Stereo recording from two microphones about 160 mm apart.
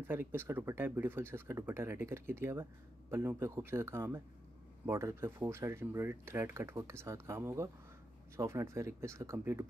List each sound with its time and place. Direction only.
0.0 s speech: 15° right (ahead or behind)